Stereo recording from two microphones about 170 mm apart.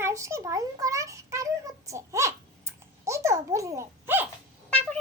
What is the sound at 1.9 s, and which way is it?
Typing, 20° right (ahead or behind).